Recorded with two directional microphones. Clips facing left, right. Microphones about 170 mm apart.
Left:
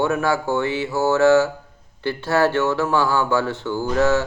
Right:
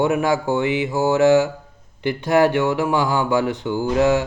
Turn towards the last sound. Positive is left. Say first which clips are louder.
# right 1 dB
turn(degrees=-15)  # may be behind; listen again after turning